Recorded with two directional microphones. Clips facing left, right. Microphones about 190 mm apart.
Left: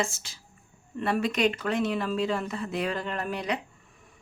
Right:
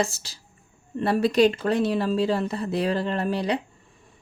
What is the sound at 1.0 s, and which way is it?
A woman's voice, 35° right (ahead or behind).